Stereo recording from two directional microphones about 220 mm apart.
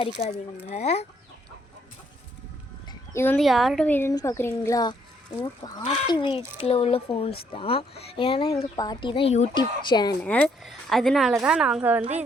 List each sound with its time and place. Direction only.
0.2 s speech: 30° left (ahead or behind)
3.1 s speech: 10° left (ahead or behind)
10.2 s speech: 5° left (ahead or behind)